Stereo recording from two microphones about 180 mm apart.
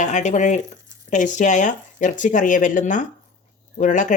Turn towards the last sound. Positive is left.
turn(degrees=45)  # may be behind; listen again after turning